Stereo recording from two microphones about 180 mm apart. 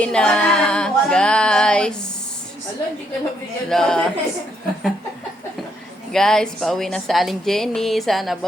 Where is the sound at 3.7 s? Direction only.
5° left (ahead or behind).